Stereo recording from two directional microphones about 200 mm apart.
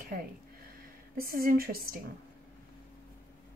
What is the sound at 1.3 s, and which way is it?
Speech, 45° right (ahead or behind).